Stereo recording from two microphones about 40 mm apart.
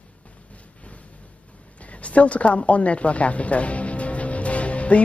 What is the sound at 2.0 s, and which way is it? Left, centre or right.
Speech, left.